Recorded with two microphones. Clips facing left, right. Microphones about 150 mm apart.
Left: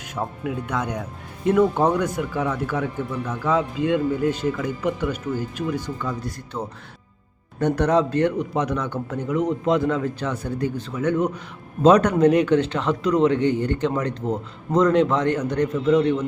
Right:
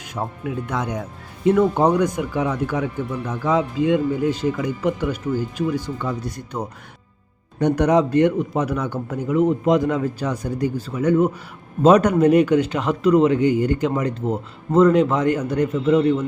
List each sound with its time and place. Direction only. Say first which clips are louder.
0.2 s a man's voice: right 1 dB; 15° right (ahead or behind)
6.0 s a man's voice: right 2 dB; 20° right (ahead or behind)